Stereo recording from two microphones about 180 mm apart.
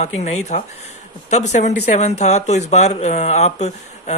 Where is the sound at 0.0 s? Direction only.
40° left (ahead or behind).